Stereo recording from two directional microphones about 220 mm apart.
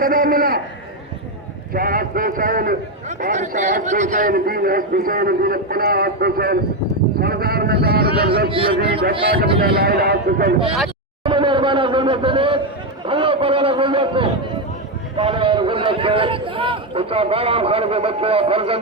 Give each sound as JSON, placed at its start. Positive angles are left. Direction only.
{"t": 0.0, "sound": "a man's voice", "side_deg": -40}
{"t": 1.7, "sound": "a man's voice", "side_deg": -40}
{"t": 7.2, "sound": "a sound", "side_deg": -45}
{"t": 9.6, "sound": "a man's voice", "side_deg": -45}
{"t": 11.2, "sound": "speech", "side_deg": -20}
{"t": 13.1, "sound": "a sound", "side_deg": -25}
{"t": 15.1, "sound": "a man's voice", "side_deg": -25}